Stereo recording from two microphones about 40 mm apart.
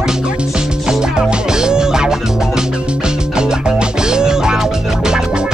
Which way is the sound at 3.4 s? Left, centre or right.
Centre.